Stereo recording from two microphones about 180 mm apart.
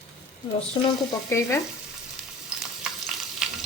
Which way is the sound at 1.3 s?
15° left (ahead or behind).